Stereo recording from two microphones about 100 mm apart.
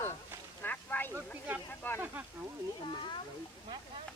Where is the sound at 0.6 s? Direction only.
20° left (ahead or behind).